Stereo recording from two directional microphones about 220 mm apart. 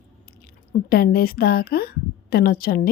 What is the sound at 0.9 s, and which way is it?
A woman's voice, 45° left (ahead or behind).